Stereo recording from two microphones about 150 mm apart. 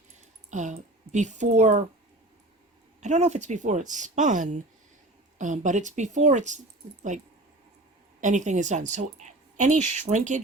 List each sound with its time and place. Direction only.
0.5 s speech: 50° right (ahead or behind)
3.0 s speech: 50° right (ahead or behind)